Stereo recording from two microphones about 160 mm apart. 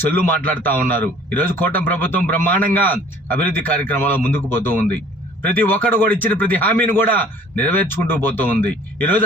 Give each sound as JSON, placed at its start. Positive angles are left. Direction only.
{"t": 0.0, "sound": "speech", "side_deg": 10}